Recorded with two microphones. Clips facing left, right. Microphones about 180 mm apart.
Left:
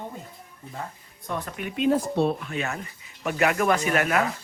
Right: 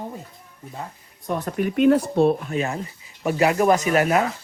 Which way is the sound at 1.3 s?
40° right (ahead or behind).